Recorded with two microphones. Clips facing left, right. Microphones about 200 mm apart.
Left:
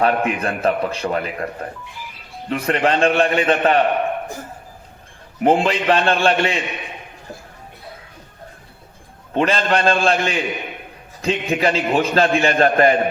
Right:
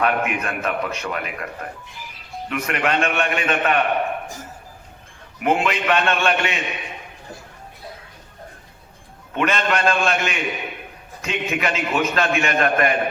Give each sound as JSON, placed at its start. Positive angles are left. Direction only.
{"t": 0.0, "sound": "a man's voice", "side_deg": 30}
{"t": 5.4, "sound": "a man's voice", "side_deg": 30}
{"t": 9.3, "sound": "a man's voice", "side_deg": 30}